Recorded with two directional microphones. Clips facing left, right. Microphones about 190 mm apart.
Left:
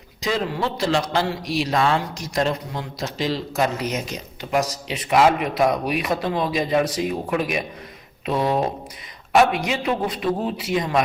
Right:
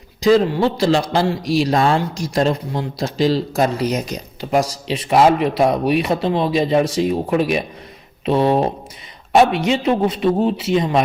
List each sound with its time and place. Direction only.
0.2 s a man's voice: 35° right (ahead or behind)